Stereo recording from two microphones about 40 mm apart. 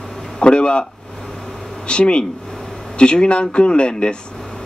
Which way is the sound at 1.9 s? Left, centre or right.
Left.